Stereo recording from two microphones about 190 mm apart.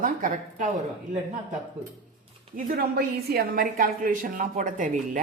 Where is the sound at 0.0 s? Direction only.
45° right (ahead or behind).